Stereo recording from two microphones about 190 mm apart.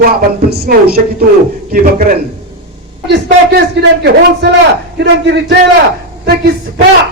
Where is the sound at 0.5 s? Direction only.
55° right (ahead or behind).